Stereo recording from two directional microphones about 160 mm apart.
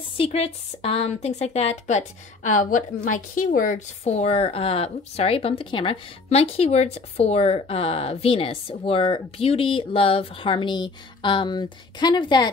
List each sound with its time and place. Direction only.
0.2 s a woman's voice: 35° left (ahead or behind)